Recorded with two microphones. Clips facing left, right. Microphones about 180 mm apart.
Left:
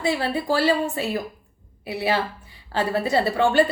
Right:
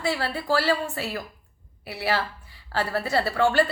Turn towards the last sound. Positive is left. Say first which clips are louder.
# left 3 dB
turn(degrees=20)  # may be behind; listen again after turning